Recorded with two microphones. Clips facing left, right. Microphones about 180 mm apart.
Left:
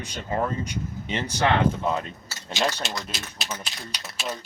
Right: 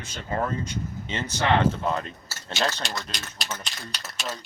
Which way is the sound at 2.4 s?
5° left (ahead or behind).